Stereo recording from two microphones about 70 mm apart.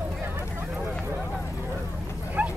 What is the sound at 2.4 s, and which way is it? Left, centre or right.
Bow-wow, right.